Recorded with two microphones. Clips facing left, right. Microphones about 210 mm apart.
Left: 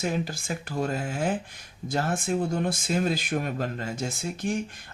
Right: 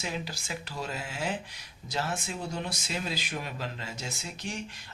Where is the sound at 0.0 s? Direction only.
50° left (ahead or behind).